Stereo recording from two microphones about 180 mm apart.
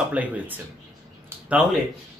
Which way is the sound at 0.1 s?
10° right (ahead or behind).